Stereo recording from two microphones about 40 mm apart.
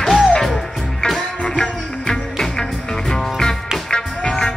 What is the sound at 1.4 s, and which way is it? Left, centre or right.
Music, left.